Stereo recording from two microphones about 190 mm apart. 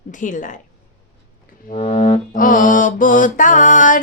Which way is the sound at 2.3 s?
45° left (ahead or behind).